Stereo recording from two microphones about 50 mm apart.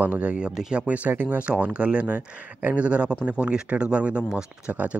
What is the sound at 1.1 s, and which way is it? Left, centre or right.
Speech, right.